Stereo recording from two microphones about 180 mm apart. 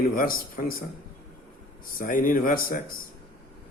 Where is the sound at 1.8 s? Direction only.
50° left (ahead or behind).